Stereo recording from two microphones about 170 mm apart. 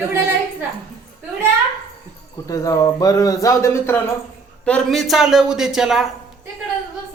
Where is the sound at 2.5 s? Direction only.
20° left (ahead or behind).